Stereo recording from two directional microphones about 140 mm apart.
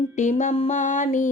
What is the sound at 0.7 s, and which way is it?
Music, 60° left (ahead or behind).